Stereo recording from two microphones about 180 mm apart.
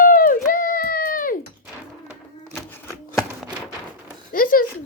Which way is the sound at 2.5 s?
10° left (ahead or behind).